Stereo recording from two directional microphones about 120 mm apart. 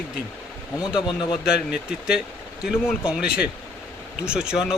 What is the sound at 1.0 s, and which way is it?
Speech, 40° left (ahead or behind).